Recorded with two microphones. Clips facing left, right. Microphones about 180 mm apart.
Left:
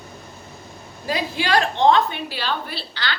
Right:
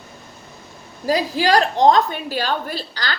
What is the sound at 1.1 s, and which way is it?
A woman's voice, 40° right (ahead or behind).